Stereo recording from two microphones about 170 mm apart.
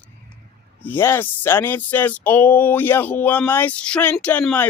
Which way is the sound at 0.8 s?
10° left (ahead or behind).